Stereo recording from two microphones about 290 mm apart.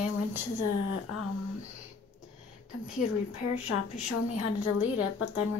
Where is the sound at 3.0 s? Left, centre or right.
Left.